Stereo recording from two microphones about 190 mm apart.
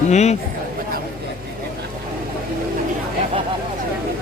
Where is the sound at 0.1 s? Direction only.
35° left (ahead or behind).